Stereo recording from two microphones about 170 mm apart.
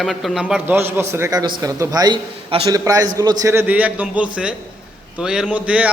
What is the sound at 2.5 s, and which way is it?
Speech, 35° right (ahead or behind).